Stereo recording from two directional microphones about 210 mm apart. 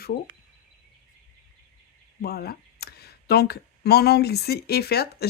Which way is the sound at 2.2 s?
45° left (ahead or behind).